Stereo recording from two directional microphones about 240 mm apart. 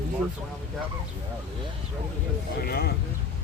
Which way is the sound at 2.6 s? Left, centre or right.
Left.